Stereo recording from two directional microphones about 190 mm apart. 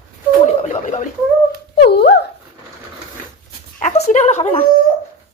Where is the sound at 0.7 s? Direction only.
40° left (ahead or behind).